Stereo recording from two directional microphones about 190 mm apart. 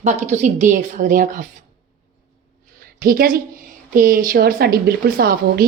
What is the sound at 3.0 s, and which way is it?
A woman's voice, 50° right (ahead or behind).